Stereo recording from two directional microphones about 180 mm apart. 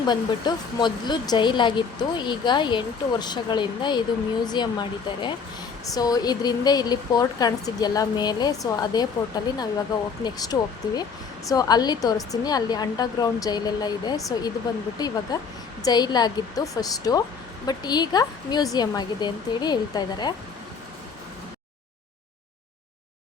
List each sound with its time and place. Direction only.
0.1 s speech: 25° left (ahead or behind)